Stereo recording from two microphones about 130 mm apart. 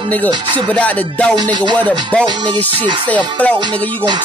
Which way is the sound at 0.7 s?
10° left (ahead or behind).